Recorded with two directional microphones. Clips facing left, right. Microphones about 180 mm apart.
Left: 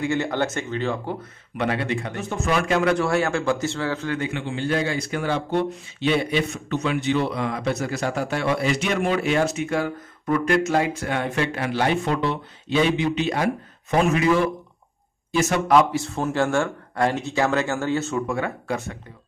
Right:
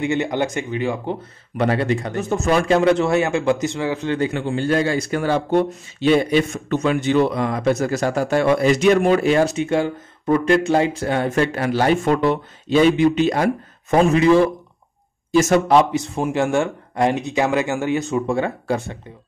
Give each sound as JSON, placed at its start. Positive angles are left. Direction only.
{"t": 0.0, "sound": "speech", "side_deg": -20}
{"t": 1.6, "sound": "speech", "side_deg": -40}
{"t": 2.7, "sound": "a man's voice", "side_deg": -25}
{"t": 4.2, "sound": "a man's voice", "side_deg": -40}
{"t": 14.1, "sound": "speech", "side_deg": -30}
{"t": 15.3, "sound": "a man's voice", "side_deg": -45}
{"t": 15.7, "sound": "speech", "side_deg": -20}
{"t": 18.2, "sound": "a man's voice", "side_deg": -25}